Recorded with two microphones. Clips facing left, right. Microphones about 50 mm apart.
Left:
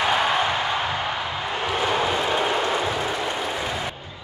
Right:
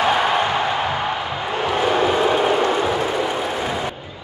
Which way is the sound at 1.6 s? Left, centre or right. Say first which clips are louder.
Right 5 dB; centre.